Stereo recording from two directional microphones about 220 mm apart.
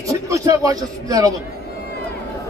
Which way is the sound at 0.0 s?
15° right (ahead or behind).